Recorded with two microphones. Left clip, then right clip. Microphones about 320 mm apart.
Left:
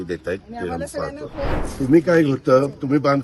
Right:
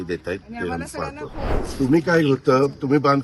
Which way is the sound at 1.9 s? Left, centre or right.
Centre.